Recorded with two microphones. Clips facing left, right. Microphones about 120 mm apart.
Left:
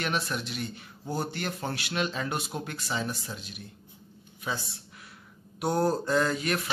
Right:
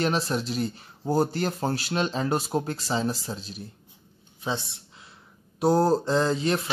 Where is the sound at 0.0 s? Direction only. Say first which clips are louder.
Right 6 dB; 35° right (ahead or behind).